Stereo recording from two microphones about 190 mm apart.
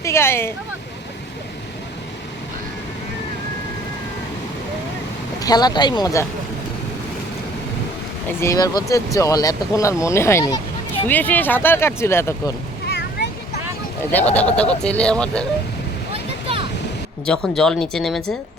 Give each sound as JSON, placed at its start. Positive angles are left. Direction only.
{"t": 0.0, "sound": "speech", "side_deg": 15}
{"t": 5.4, "sound": "speech", "side_deg": 20}
{"t": 8.4, "sound": "speech", "side_deg": 15}
{"t": 12.9, "sound": "a sound", "side_deg": 60}
{"t": 14.1, "sound": "speech", "side_deg": 10}
{"t": 16.1, "sound": "a sound", "side_deg": -30}
{"t": 17.2, "sound": "speech", "side_deg": 5}